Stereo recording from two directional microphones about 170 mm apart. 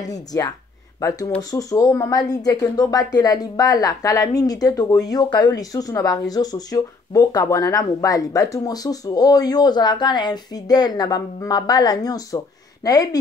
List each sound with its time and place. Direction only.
0.0 s a woman's voice: 20° left (ahead or behind)